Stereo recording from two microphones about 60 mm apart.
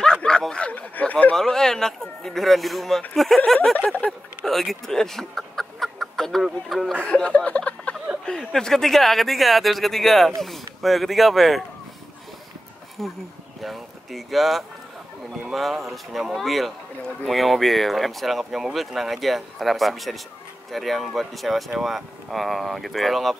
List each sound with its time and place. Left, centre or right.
0.0 s a sound: centre
0.5 s speech: centre
1.3 s speech: centre
3.7 s speech: left
4.5 s chicken: centre
6.4 s speech: centre
7.1 s a sound: centre
8.3 s speech: centre
13.0 s speech: centre